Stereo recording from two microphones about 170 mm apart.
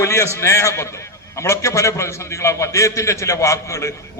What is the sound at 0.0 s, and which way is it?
A man's voice, 15° left (ahead or behind).